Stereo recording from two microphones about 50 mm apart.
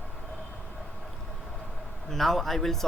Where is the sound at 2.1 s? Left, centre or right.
Centre.